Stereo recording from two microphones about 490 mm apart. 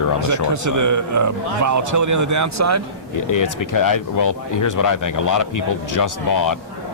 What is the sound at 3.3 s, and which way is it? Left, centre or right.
Speech, left.